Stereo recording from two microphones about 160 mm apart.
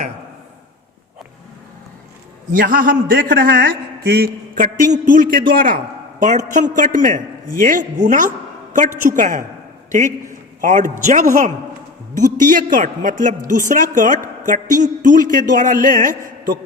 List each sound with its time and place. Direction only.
2.5 s a woman's voice: 60° right (ahead or behind)
6.3 s a man's voice: 50° right (ahead or behind)
10.6 s a man's voice: 50° right (ahead or behind)